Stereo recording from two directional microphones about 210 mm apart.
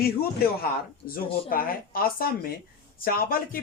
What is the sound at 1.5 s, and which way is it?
Speech, 45° left (ahead or behind).